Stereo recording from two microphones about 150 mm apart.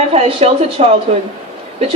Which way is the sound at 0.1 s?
40° right (ahead or behind).